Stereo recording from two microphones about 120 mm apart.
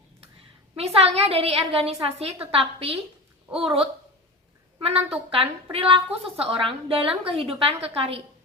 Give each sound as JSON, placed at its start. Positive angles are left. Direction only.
{"t": 0.8, "sound": "a woman's voice", "side_deg": -60}